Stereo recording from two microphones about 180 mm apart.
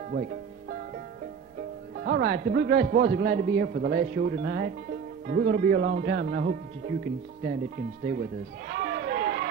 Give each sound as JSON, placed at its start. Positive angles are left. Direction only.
{"t": 0.1, "sound": "music", "side_deg": -60}
{"t": 2.0, "sound": "a man's voice", "side_deg": -60}
{"t": 8.0, "sound": "a sound", "side_deg": -55}